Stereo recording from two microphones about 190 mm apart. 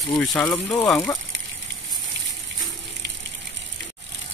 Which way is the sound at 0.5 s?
20° left (ahead or behind).